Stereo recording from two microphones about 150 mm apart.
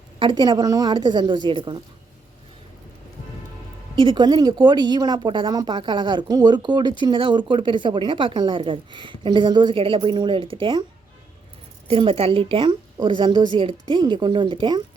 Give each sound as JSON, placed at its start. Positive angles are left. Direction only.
{"t": 0.2, "sound": "a woman's voice", "side_deg": -30}
{"t": 3.9, "sound": "speech", "side_deg": -35}
{"t": 11.9, "sound": "speech", "side_deg": -40}